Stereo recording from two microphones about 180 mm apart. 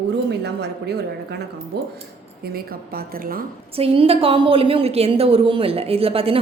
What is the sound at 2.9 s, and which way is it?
Speech, 55° right (ahead or behind).